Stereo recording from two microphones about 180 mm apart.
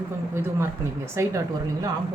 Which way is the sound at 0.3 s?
15° right (ahead or behind).